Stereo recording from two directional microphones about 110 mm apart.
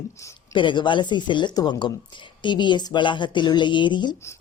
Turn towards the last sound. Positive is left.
turn(degrees=45)  # may be behind; listen again after turning